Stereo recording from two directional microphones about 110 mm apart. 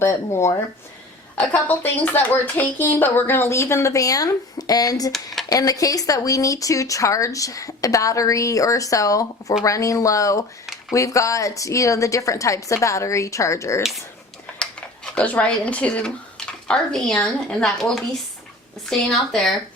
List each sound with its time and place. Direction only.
0.0 s a woman's voice: 25° left (ahead or behind)
1.4 s a woman's voice: 15° left (ahead or behind); by 5.1 s 35° left (ahead or behind)
5.1 s a woman's voice: centre (ahead or behind)
5.5 s a woman's voice: 35° left (ahead or behind)
14.6 s a sound: 10° left (ahead or behind)
17.2 s a woman's voice: 5° left (ahead or behind)